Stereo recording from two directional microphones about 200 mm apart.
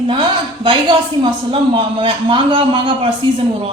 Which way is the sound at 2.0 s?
25° right (ahead or behind).